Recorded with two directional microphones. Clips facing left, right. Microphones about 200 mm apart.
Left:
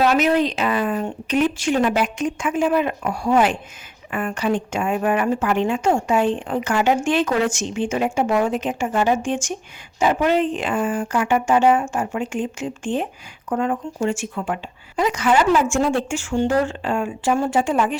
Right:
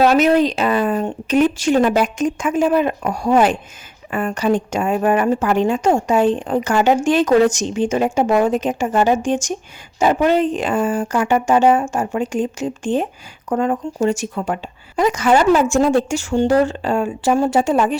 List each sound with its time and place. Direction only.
0.0 s speech: 40° right (ahead or behind)